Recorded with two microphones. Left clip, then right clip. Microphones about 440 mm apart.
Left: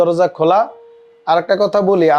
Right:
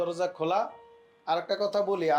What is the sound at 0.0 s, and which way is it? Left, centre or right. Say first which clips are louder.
Speech: left 16 dB; left.